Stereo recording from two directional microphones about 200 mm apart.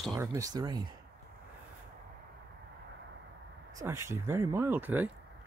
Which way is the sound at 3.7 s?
15° right (ahead or behind).